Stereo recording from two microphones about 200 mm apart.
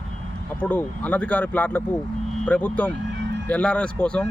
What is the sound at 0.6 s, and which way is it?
A man's voice, 10° left (ahead or behind).